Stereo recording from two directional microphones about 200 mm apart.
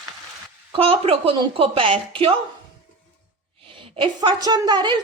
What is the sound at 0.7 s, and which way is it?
A woman's voice, 30° right (ahead or behind).